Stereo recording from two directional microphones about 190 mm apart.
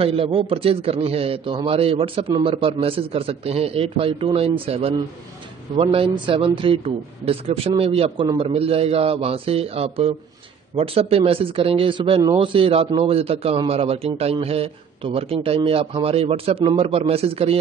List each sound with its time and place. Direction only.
0.0 s a man's voice: 30° right (ahead or behind)